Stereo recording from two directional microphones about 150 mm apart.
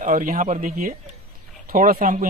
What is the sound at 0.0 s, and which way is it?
Speech, 60° right (ahead or behind).